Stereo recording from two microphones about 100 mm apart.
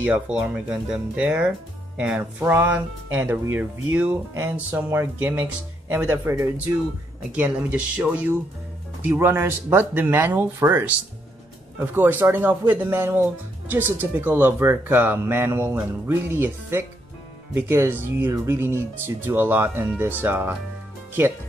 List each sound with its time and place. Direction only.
0.0 s speech: 10° right (ahead or behind)
7.3 s speech: 15° right (ahead or behind)